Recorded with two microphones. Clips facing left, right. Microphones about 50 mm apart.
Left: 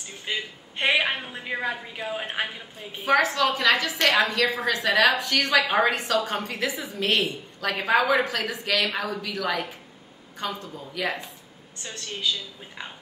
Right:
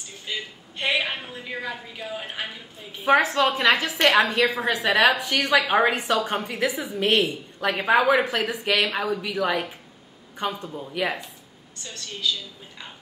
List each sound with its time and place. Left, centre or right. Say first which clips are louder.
0.2 s a sound: left 2 dB; left
1.3 s a woman's voice: left 3 dB; left
3.1 s a woman's voice: right 2 dB; right
4.8 s a woman's voice: right 1 dB; centre